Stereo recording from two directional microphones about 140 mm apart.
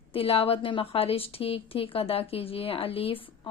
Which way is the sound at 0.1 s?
40° left (ahead or behind).